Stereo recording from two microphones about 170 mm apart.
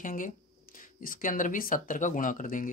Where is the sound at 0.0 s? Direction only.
55° left (ahead or behind).